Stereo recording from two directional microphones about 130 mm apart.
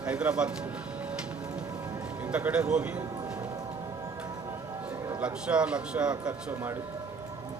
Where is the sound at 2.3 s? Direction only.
10° right (ahead or behind).